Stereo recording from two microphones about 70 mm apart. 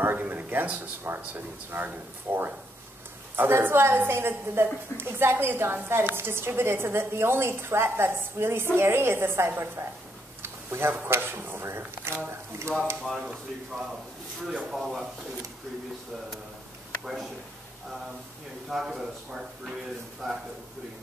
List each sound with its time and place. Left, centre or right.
0.0 s a woman's voice: right
13.0 s a man's voice: centre
17.0 s a man's voice: centre
18.7 s a man's voice: centre